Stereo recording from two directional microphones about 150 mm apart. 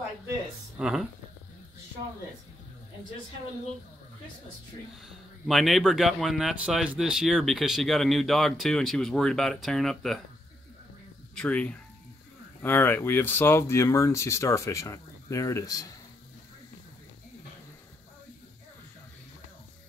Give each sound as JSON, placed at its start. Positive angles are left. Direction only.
{"t": 0.7, "sound": "speech", "side_deg": -5}
{"t": 5.5, "sound": "speech", "side_deg": 0}
{"t": 11.3, "sound": "speech", "side_deg": 10}